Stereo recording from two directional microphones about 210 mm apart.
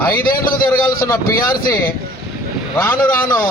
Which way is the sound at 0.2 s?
45° left (ahead or behind).